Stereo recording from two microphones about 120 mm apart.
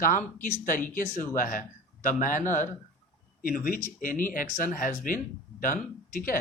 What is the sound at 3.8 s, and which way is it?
Speech, 90° left.